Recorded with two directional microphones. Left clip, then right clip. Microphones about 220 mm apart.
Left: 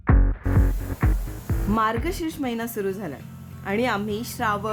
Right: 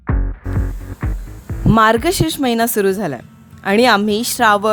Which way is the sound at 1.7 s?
45° right (ahead or behind).